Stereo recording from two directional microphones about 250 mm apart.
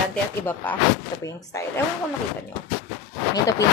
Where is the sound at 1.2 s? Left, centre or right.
Centre.